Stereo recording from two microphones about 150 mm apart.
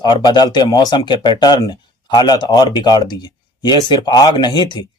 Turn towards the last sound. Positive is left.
turn(degrees=30)  # may be behind; listen again after turning